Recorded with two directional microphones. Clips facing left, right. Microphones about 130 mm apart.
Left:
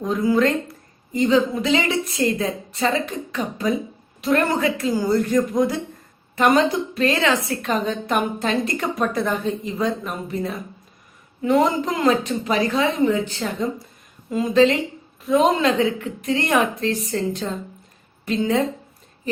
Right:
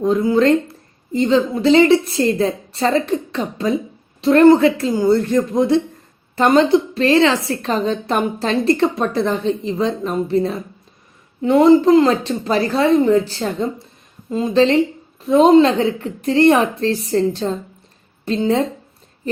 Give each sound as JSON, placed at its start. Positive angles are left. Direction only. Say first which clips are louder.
{"t": 0.0, "sound": "a woman's voice", "louder": "right 4 dB", "side_deg": -25}